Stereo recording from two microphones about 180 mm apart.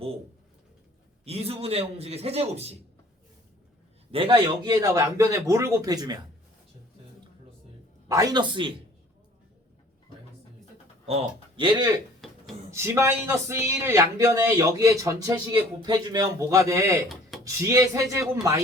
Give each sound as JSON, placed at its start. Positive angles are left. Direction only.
{"t": 1.2, "sound": "a man's voice", "side_deg": -35}
{"t": 4.1, "sound": "a man's voice", "side_deg": -30}
{"t": 8.0, "sound": "a man's voice", "side_deg": -20}
{"t": 11.0, "sound": "speech", "side_deg": -35}
{"t": 12.2, "sound": "a sound", "side_deg": 0}
{"t": 12.7, "sound": "speech", "side_deg": -15}